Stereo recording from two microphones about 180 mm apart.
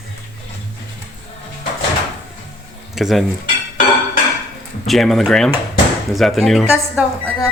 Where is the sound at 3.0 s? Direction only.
Centre (ahead or behind).